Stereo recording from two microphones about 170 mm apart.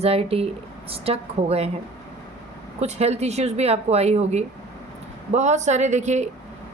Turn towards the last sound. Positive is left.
turn(degrees=-45)  # may be behind; listen again after turning